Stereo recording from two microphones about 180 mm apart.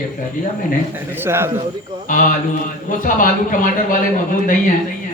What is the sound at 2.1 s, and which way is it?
Speech, 50° left (ahead or behind).